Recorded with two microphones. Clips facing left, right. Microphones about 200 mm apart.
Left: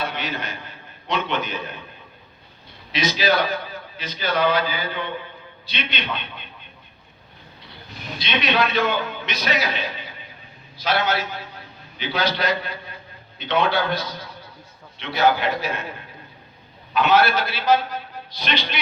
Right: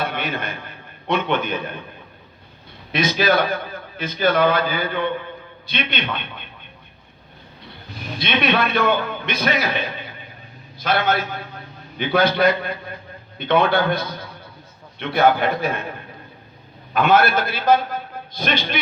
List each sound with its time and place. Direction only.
0.0 s a man's voice: 55° right (ahead or behind)
2.9 s a man's voice: 55° right (ahead or behind)
8.2 s a man's voice: 55° right (ahead or behind)
16.9 s a man's voice: 50° right (ahead or behind)